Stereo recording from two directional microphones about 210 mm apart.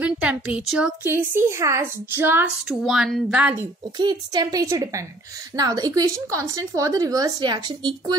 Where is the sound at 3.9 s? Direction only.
20° right (ahead or behind).